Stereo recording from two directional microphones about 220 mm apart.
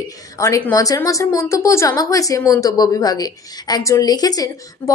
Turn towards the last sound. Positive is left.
turn(degrees=15)  # may be behind; listen again after turning